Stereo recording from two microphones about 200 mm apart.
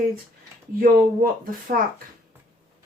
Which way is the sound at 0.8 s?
45° right (ahead or behind).